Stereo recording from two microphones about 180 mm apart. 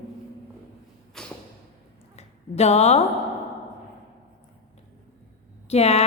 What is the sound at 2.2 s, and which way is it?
Speech, 35° left (ahead or behind).